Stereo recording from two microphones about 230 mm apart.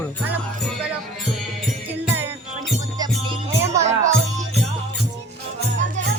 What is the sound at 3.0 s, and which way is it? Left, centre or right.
Music, centre.